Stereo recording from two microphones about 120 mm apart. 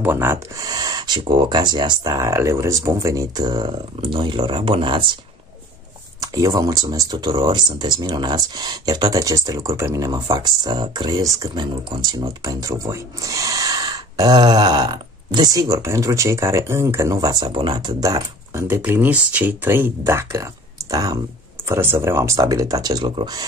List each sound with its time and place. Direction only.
0.0 s speech: 20° right (ahead or behind); by 5.1 s 45° right (ahead or behind)
6.2 s speech: 30° right (ahead or behind)
18.8 s speech: 15° right (ahead or behind); by 21.2 s 30° right (ahead or behind)
21.6 s speech: 20° right (ahead or behind); by 23.4 s 35° right (ahead or behind)